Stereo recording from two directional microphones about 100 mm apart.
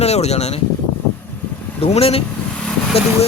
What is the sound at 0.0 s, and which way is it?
Speech, 90° left.